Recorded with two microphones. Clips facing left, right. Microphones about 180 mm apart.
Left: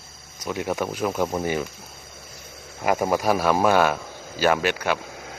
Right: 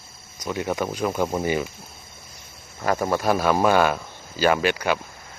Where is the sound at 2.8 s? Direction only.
10° left (ahead or behind).